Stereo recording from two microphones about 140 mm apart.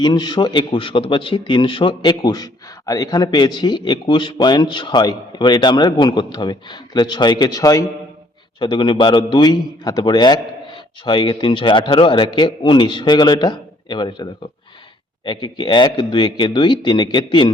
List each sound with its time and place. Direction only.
0.0 s a man's voice: 30° left (ahead or behind)